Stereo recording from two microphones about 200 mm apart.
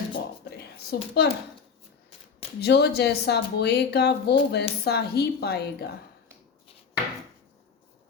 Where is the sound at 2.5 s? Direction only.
55° left (ahead or behind).